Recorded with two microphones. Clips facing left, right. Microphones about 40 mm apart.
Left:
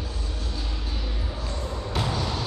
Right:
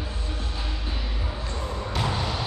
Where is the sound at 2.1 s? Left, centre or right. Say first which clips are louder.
Even; right.